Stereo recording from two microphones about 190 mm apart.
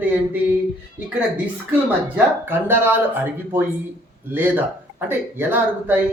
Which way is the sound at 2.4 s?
10° right (ahead or behind).